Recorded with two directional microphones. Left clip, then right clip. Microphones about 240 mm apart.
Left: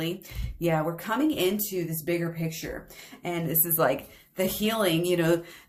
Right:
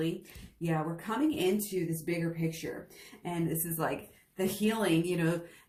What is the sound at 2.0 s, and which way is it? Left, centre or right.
Speech, left.